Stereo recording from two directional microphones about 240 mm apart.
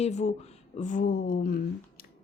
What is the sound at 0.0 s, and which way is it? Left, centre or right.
Speech, left.